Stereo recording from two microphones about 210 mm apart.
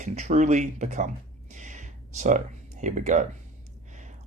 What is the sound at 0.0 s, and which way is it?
Speech, 35° right (ahead or behind).